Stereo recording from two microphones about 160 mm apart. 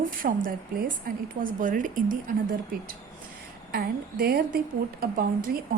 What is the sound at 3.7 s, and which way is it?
Speech, 75° right (ahead or behind).